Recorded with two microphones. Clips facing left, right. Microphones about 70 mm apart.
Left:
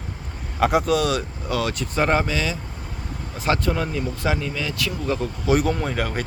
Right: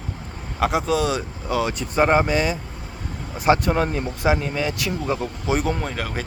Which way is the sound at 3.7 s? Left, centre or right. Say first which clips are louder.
Right 3 dB; right.